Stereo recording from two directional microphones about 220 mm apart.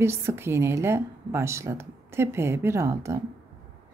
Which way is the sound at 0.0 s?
10° right (ahead or behind).